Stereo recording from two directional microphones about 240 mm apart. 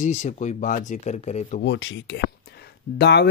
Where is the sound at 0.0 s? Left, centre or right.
Left.